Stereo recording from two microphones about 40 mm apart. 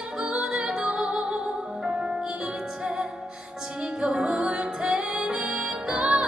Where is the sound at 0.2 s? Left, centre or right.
Centre.